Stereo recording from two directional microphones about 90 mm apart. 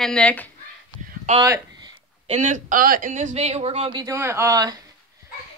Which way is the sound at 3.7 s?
65° right (ahead or behind).